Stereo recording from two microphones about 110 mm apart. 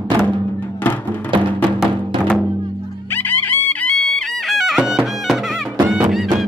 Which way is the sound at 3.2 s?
15° left (ahead or behind).